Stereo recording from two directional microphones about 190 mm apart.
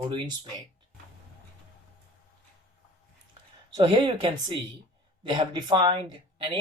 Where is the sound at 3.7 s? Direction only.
25° right (ahead or behind).